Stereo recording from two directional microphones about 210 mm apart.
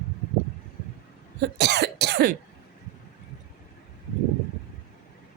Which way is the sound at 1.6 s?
55° right (ahead or behind).